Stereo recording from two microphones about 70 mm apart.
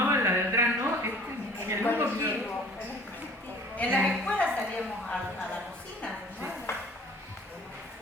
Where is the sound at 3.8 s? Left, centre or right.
Left.